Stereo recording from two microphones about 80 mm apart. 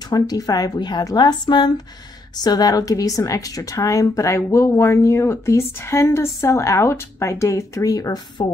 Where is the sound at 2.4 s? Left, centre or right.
Left.